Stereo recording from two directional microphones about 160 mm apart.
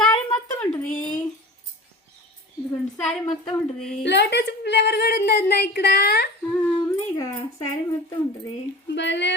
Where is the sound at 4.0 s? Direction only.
90° left.